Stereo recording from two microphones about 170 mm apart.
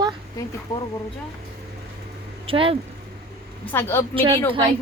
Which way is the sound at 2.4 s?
30° right (ahead or behind).